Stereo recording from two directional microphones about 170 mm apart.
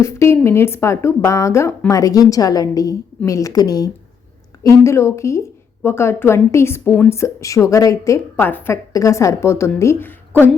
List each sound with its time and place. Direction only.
0.0 s a woman's voice: 15° left (ahead or behind)